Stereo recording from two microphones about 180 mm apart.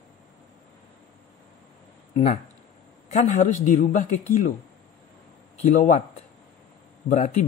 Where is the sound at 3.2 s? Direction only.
45° left (ahead or behind).